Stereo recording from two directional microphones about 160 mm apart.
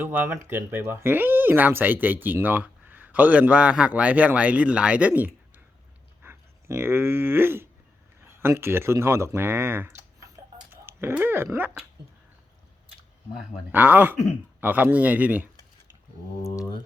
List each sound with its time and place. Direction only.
0.0 s speech: 10° right (ahead or behind)
6.2 s a sound: 15° right (ahead or behind)
8.4 s speech: 15° right (ahead or behind)
10.2 s dog: 15° right (ahead or behind)
13.7 s speech: 10° right (ahead or behind)